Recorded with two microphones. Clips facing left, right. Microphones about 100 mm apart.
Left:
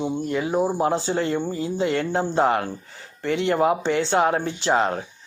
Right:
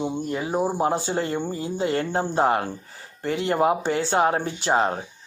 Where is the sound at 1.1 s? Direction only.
40° right (ahead or behind).